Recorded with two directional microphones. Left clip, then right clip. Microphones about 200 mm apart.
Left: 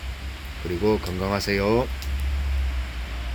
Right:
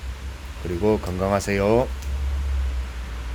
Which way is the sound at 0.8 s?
15° right (ahead or behind).